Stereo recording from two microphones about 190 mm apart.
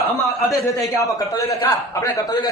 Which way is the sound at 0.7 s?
20° left (ahead or behind).